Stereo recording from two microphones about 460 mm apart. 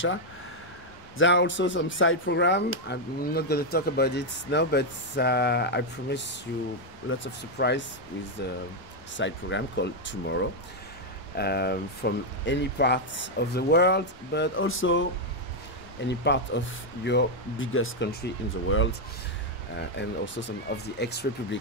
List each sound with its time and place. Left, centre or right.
1.1 s speech: left
9.1 s speech: left
11.3 s speech: left
16.1 s speech: left
20.0 s speech: left